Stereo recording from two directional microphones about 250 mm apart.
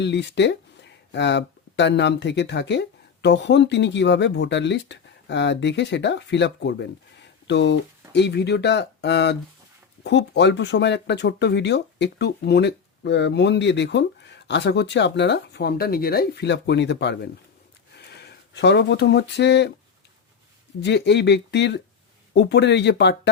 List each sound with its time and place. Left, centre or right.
0.0 s speech: left
20.8 s speech: left